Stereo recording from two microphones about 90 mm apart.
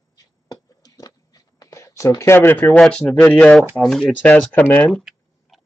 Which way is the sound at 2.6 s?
5° left (ahead or behind).